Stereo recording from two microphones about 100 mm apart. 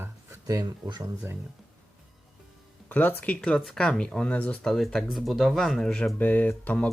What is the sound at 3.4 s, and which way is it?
Speech, 5° left (ahead or behind).